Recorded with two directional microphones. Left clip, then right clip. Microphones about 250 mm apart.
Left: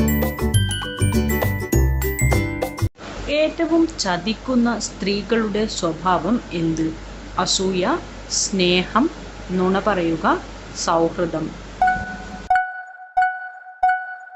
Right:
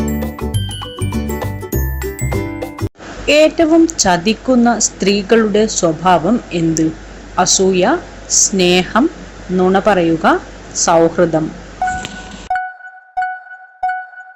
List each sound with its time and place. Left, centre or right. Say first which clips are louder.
0.2 s music: even; centre
3.2 s a woman's voice: right 10 dB; centre
11.8 s wind chime: left 1 dB; centre
12.5 s music: left 1 dB; centre
13.8 s music: left 1 dB; centre